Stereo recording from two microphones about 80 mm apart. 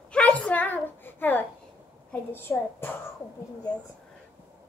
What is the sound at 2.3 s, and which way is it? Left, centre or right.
Speech, left.